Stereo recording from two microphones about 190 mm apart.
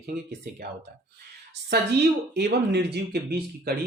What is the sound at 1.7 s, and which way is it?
Speech, 60° right (ahead or behind).